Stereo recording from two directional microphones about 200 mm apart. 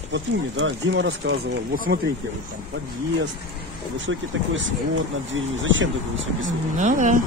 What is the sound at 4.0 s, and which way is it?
Speech, 70° right (ahead or behind).